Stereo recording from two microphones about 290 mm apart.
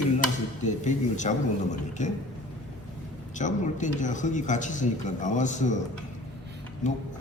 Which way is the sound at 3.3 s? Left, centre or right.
Left.